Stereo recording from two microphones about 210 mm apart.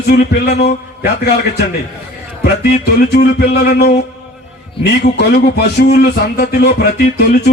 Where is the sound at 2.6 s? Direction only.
50° left (ahead or behind).